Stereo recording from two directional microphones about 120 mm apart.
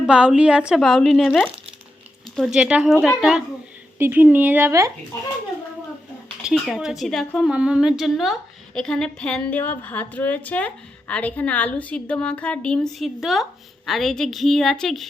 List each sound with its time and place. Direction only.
0.0 s a woman's voice: 5° right (ahead or behind)
3.9 s speech: 15° right (ahead or behind)
6.4 s a woman's voice: centre (ahead or behind)